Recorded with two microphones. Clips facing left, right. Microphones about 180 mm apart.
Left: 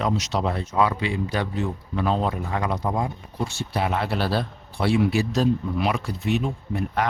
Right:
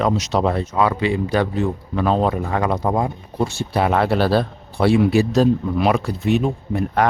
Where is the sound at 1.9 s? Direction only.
65° right (ahead or behind).